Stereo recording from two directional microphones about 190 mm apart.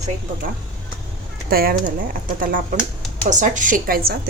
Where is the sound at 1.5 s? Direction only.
50° right (ahead or behind).